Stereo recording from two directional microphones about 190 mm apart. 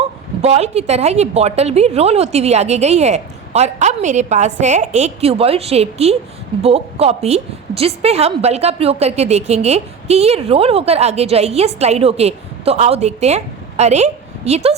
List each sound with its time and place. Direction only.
0.4 s a woman's voice: 35° right (ahead or behind)